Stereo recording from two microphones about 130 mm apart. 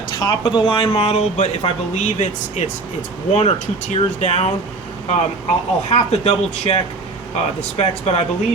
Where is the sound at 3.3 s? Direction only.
50° left (ahead or behind).